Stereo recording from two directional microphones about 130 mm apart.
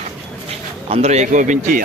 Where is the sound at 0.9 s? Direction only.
55° right (ahead or behind); by 1.8 s 75° right (ahead or behind).